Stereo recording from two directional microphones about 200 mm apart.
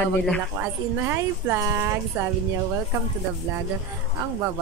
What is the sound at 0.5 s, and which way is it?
A woman's voice, 10° right (ahead or behind).